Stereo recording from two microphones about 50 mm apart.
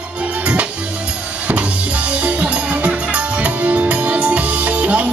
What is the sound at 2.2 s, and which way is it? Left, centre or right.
Music, right.